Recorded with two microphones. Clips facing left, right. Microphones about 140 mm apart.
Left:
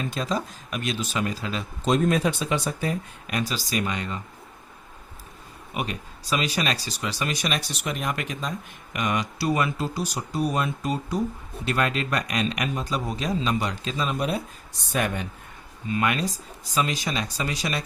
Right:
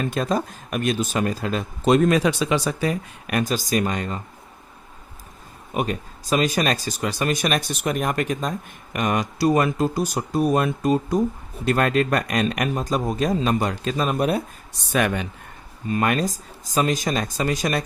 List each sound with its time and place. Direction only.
0.0 s speech: 55° right (ahead or behind)
1.9 s speech: 85° right; by 4.2 s 45° right (ahead or behind)
5.7 s speech: 45° right (ahead or behind)
14.9 s speech: 90° right
15.9 s speech: 45° right (ahead or behind)